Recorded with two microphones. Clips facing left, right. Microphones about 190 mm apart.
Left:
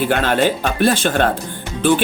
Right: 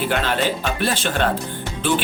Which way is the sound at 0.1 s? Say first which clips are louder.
Left 5 dB; 50° left (ahead or behind).